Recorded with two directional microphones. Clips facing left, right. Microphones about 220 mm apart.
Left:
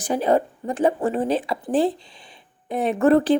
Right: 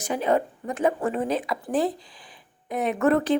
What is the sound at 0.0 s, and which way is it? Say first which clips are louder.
Speech: left 3 dB; 35° left (ahead or behind).